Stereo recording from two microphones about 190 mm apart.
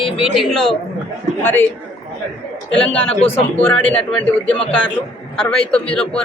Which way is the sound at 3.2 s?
30° left (ahead or behind).